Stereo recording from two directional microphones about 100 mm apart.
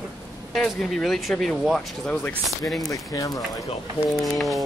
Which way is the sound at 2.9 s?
35° left (ahead or behind).